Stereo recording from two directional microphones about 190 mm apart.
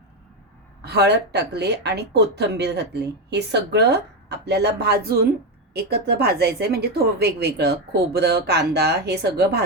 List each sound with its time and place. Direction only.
0.8 s speech: 60° right (ahead or behind)